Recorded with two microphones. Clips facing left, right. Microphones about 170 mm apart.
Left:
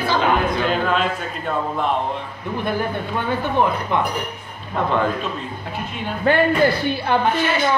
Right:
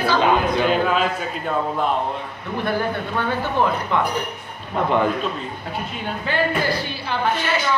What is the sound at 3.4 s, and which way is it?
Speech, 20° left (ahead or behind).